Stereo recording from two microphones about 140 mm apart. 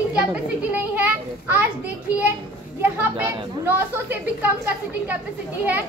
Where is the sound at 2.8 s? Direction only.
15° right (ahead or behind).